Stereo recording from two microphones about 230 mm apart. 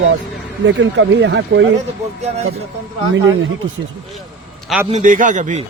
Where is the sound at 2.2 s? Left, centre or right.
Right.